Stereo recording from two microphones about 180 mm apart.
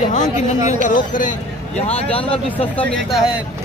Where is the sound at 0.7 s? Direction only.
45° left (ahead or behind).